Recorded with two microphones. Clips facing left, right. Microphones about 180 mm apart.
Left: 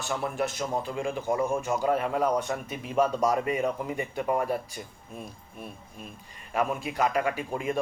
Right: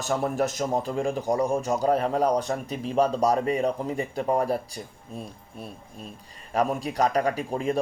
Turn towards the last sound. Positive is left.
turn(degrees=-35)  # may be behind; listen again after turning